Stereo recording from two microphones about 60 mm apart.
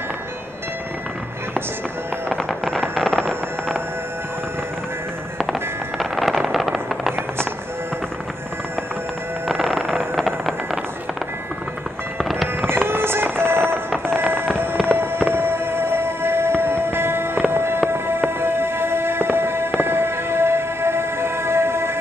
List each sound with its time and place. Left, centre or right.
2.2 s fireworks: centre
5.4 s a sound: centre
9.5 s music: centre
12.2 s fireworks: centre
12.8 s music: right
14.8 s fireworks: centre
15.2 s music: right